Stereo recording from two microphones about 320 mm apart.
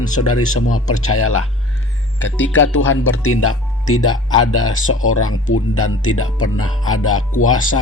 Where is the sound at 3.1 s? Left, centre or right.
Left.